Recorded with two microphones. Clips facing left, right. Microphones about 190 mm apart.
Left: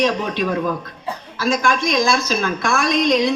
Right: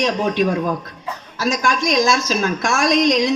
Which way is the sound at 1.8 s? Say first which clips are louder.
Right 1 dB; 45° right (ahead or behind).